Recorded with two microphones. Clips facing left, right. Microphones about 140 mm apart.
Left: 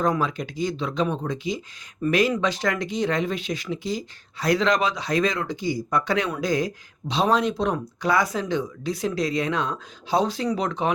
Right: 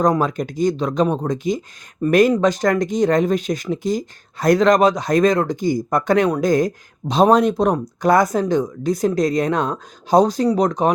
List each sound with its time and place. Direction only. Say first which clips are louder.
0.0 s speech: right 6 dB; 45° right (ahead or behind)